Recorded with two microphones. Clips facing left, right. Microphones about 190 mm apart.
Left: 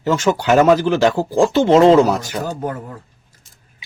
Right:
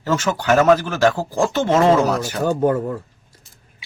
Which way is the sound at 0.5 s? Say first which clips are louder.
Left 2 dB; 15° left (ahead or behind).